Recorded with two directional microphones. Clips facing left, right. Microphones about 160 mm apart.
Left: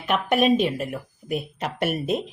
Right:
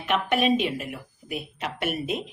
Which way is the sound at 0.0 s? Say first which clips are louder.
Left 3 dB; 40° left (ahead or behind).